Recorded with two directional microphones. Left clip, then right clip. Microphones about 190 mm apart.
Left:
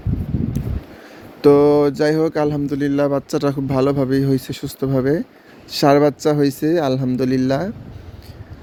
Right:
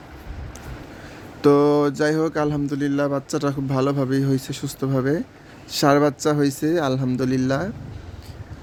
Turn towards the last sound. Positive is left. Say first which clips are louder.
# left 4 dB
turn(degrees=20)  # may be behind; listen again after turning